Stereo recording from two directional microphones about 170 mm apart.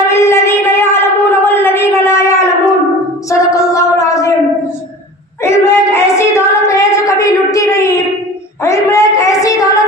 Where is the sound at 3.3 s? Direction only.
20° left (ahead or behind).